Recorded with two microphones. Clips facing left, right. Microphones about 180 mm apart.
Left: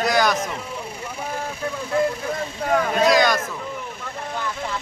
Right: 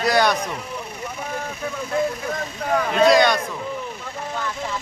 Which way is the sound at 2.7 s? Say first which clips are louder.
Right 2 dB; centre (ahead or behind).